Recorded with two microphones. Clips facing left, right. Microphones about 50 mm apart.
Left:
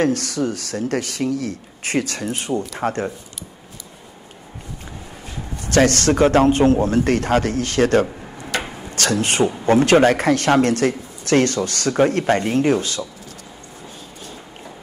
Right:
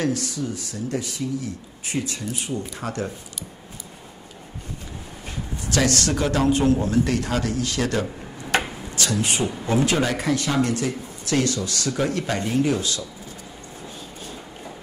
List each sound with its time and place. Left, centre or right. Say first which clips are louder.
0.0 s speech: left 6 dB; left
2.7 s speech: left 6 dB; left
5.6 s speech: left 6 dB; left
8.5 s a sound: right 2 dB; right
8.9 s speech: left 5 dB; left